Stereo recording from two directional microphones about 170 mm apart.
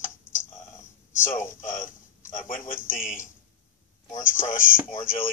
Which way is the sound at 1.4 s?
50° left (ahead or behind).